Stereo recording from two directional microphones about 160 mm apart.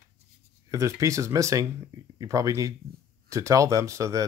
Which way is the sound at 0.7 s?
20° right (ahead or behind).